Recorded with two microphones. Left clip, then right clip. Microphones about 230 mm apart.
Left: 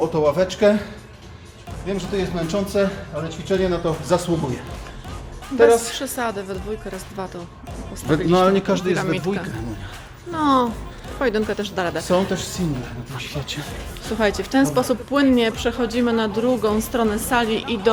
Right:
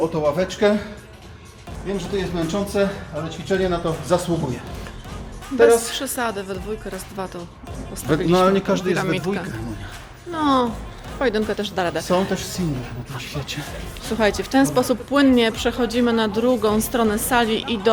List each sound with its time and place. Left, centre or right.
0.1 s speech: centre
2.0 s a woman's voice: centre
8.4 s a woman's voice: centre